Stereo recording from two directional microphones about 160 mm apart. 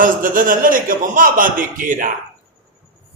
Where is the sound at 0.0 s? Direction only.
60° right (ahead or behind).